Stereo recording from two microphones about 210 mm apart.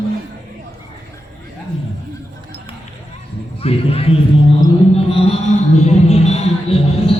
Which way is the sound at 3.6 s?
30° left (ahead or behind).